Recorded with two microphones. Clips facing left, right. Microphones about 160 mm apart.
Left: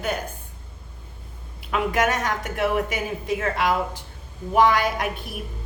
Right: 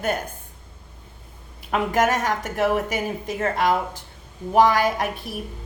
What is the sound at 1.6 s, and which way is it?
A woman's voice, 45° right (ahead or behind).